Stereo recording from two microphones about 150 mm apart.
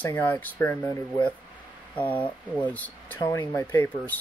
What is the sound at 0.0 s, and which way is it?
Speech, 10° left (ahead or behind).